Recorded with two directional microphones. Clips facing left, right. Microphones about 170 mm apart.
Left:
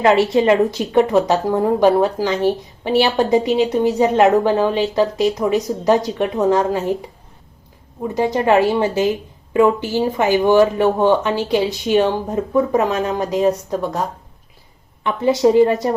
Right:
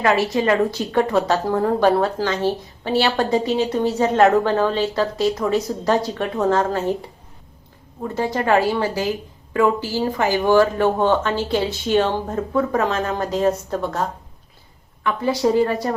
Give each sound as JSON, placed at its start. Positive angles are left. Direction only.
{"t": 0.0, "sound": "speech", "side_deg": 25}
{"t": 8.0, "sound": "speech", "side_deg": 15}